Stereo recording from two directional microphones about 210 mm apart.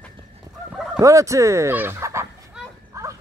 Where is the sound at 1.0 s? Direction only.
15° right (ahead or behind).